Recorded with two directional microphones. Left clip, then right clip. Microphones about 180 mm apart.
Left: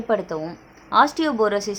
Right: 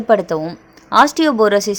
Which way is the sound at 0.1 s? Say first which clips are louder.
Right 9 dB; 40° right (ahead or behind).